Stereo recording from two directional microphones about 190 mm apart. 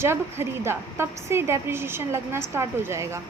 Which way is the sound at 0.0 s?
15° right (ahead or behind).